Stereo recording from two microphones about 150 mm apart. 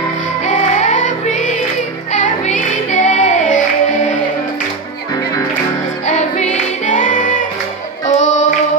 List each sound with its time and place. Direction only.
0.5 s music: 55° left (ahead or behind)
6.0 s music: 50° left (ahead or behind)